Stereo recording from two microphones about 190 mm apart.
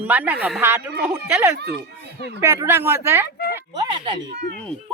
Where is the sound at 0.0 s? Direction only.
10° right (ahead or behind).